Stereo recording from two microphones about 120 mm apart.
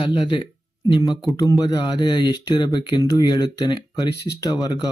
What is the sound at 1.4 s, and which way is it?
Speech, 30° left (ahead or behind).